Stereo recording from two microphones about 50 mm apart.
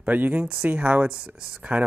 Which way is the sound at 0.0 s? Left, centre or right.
Right.